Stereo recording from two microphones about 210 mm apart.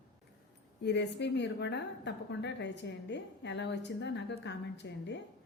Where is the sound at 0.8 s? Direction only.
55° left (ahead or behind).